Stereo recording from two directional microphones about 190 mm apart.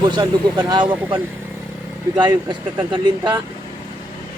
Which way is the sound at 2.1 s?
25° right (ahead or behind).